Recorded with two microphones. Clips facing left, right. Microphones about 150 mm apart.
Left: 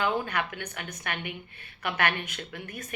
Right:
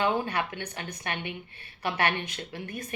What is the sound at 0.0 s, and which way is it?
A woman's voice, 30° right (ahead or behind).